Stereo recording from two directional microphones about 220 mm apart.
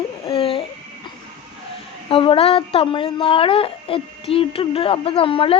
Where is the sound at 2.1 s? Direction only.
25° left (ahead or behind).